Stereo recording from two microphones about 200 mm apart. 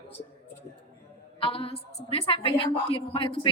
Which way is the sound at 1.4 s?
25° left (ahead or behind).